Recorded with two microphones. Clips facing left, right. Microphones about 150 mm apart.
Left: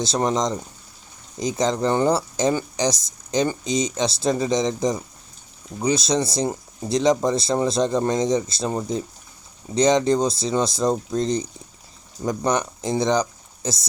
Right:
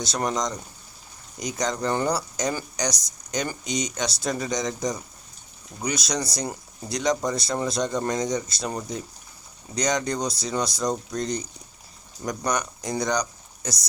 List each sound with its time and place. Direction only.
0.0 s speech: 25° left (ahead or behind)